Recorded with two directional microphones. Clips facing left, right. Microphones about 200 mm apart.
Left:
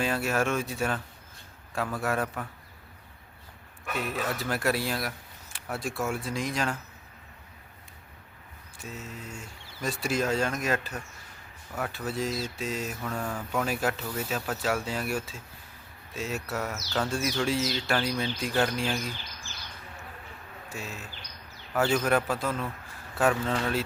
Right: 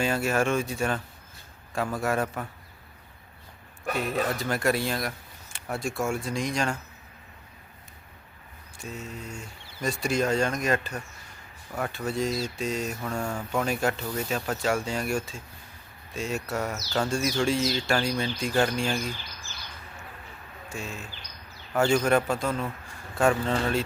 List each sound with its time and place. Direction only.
0.0 s speech: centre (ahead or behind)
3.8 s a man's voice: 40° right (ahead or behind)
4.4 s speech: 5° left (ahead or behind)
8.8 s speech: centre (ahead or behind)
20.7 s speech: 5° left (ahead or behind)